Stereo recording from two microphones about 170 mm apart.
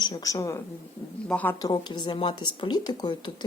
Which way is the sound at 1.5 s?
20° left (ahead or behind).